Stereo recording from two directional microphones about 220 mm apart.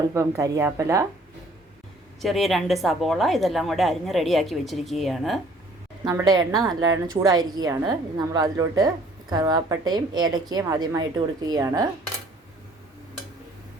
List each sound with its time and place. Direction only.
0.1 s a woman's voice: 15° right (ahead or behind)
2.2 s a woman's voice: centre (ahead or behind)
6.1 s a woman's voice: 15° right (ahead or behind)